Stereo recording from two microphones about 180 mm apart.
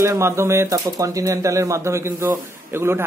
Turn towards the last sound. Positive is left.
turn(degrees=-15)  # may be behind; listen again after turning